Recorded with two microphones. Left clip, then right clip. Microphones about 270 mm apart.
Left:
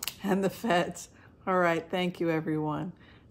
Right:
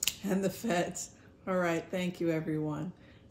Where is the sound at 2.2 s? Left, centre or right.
Centre.